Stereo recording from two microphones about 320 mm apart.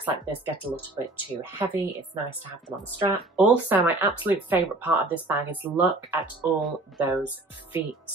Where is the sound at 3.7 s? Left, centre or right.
Centre.